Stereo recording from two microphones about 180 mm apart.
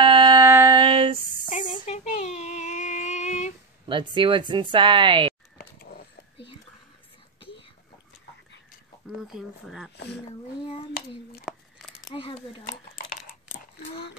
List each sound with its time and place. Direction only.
0.0 s a sound: 25° right (ahead or behind)
0.7 s a sound: 30° right (ahead or behind)
1.7 s child singing: 35° left (ahead or behind)
3.9 s speech: 25° right (ahead or behind)
5.6 s a sound: 60° left (ahead or behind)
6.3 s whispering: 30° left (ahead or behind)
9.2 s speech: centre (ahead or behind)
9.9 s speech: 70° left (ahead or behind)
12.1 s speech: 30° left (ahead or behind)